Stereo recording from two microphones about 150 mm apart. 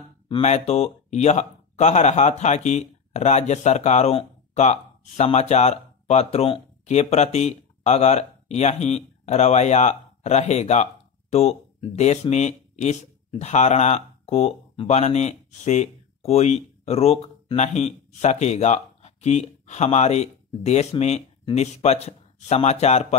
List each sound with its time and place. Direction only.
0.3 s speech: 45° left (ahead or behind)